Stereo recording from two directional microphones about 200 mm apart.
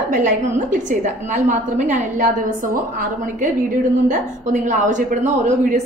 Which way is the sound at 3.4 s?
40° right (ahead or behind).